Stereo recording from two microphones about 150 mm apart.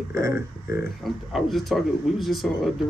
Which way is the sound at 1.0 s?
Centre (ahead or behind).